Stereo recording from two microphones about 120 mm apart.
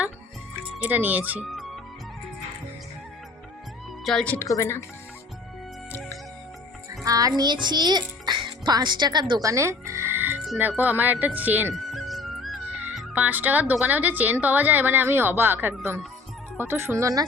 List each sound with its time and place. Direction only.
0.8 s speech: 15° right (ahead or behind)
4.0 s a woman's voice: 5° left (ahead or behind)
4.4 s speech: 25° left (ahead or behind)
7.0 s a child's voice: 30° right (ahead or behind)
9.4 s speech: 25° right (ahead or behind)
11.7 s music: centre (ahead or behind)
13.1 s speech: 15° right (ahead or behind)